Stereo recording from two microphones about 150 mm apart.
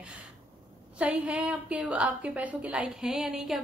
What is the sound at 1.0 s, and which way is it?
A woman's voice, 10° right (ahead or behind).